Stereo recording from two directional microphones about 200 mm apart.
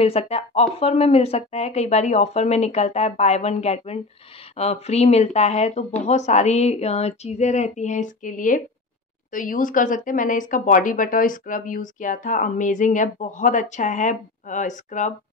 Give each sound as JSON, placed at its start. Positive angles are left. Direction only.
{"t": 0.0, "sound": "speech", "side_deg": 30}